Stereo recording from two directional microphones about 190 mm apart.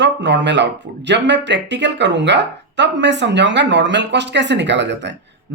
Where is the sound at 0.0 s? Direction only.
65° right (ahead or behind).